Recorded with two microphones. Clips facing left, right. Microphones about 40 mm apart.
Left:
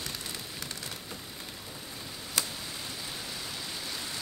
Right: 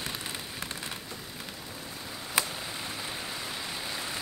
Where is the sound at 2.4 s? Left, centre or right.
Right.